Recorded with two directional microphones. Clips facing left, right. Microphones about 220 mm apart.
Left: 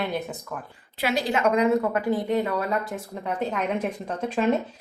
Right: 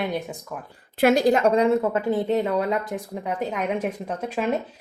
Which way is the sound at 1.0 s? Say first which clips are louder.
Right 7 dB; 45° right (ahead or behind).